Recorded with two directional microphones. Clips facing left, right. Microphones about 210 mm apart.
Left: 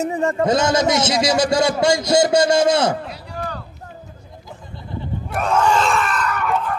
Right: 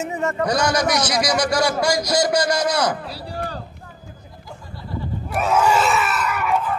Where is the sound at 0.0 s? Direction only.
30° left (ahead or behind).